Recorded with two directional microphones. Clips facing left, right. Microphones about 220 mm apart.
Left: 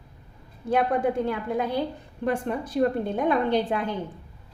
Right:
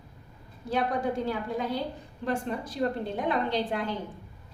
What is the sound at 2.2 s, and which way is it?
A woman's voice, 55° left (ahead or behind).